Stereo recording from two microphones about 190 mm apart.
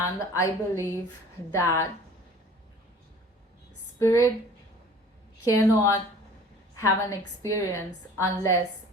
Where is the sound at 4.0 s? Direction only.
15° left (ahead or behind).